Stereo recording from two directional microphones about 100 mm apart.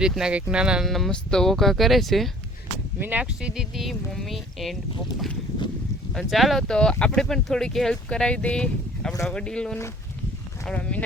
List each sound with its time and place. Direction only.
0.0 s speech: 5° right (ahead or behind)
3.0 s speech: 15° right (ahead or behind); by 4.8 s centre (ahead or behind)
6.1 s speech: centre (ahead or behind)